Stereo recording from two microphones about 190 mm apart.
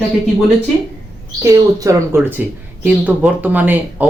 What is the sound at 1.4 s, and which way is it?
Speech, 15° right (ahead or behind).